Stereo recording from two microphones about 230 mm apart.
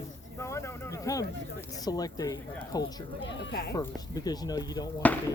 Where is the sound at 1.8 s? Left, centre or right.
Centre.